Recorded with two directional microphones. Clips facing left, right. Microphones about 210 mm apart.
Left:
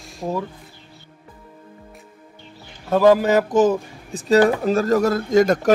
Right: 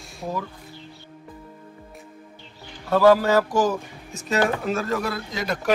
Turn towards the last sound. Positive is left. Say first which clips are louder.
# left 12 dB
turn(degrees=45)  # may be behind; listen again after turning